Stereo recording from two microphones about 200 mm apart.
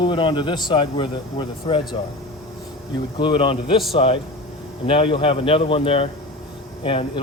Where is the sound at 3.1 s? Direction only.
25° left (ahead or behind).